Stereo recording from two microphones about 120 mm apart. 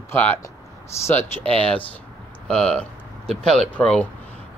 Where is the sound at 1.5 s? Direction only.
10° left (ahead or behind).